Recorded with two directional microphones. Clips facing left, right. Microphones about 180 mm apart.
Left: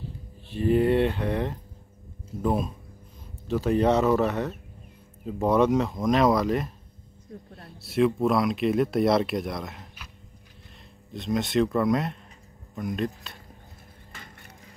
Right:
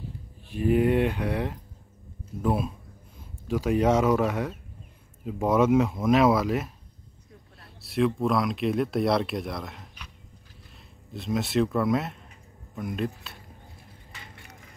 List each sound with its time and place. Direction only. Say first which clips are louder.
0.5 s speech: left 1 dB; 10° right (ahead or behind)
11.1 s speech: left 1 dB; centre (ahead or behind)
14.1 s a sound: left 1 dB; 45° left (ahead or behind)